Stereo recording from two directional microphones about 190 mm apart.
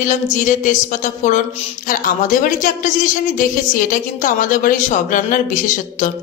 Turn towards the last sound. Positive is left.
turn(degrees=45)  # may be behind; listen again after turning